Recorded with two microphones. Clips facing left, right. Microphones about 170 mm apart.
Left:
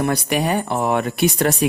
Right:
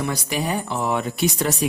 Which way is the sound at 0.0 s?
65° left (ahead or behind).